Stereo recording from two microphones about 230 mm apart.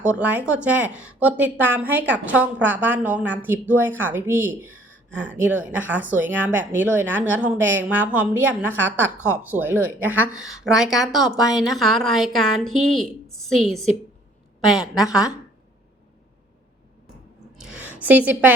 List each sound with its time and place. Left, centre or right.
0.0 s a woman's voice: centre
17.6 s a woman's voice: centre